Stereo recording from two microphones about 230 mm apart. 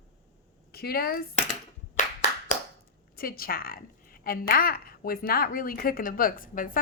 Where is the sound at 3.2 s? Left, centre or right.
Left.